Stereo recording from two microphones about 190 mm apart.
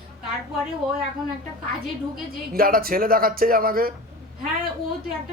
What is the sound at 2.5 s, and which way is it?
A man's voice, 50° right (ahead or behind).